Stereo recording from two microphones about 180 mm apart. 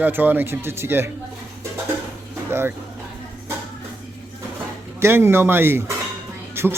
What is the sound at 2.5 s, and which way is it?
Speech, 15° right (ahead or behind).